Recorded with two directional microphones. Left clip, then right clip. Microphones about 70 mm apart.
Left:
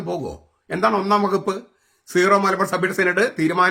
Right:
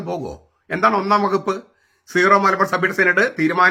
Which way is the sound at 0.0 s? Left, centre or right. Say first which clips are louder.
Even; left.